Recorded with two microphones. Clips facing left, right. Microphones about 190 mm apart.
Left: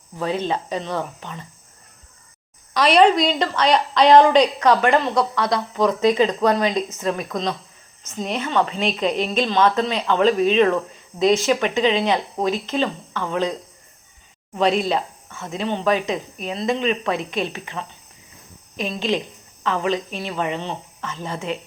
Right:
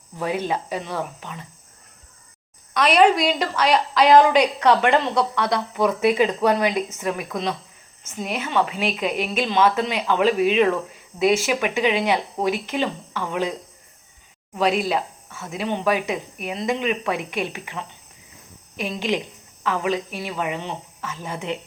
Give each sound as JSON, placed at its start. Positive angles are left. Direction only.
{"t": 0.2, "sound": "speech", "side_deg": -10}
{"t": 2.7, "sound": "a woman's voice", "side_deg": 0}
{"t": 4.6, "sound": "speech", "side_deg": -15}
{"t": 14.5, "sound": "speech", "side_deg": -5}